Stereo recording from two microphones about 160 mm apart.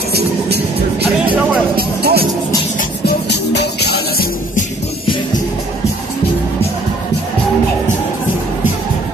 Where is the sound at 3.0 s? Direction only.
90° left.